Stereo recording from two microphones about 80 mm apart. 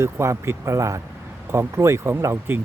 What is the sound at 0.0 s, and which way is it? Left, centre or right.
Speech, right.